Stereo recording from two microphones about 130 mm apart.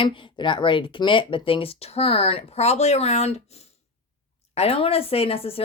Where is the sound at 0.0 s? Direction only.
40° left (ahead or behind); by 3.4 s 60° left (ahead or behind).